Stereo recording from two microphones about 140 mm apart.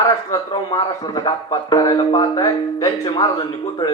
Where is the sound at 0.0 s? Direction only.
30° left (ahead or behind).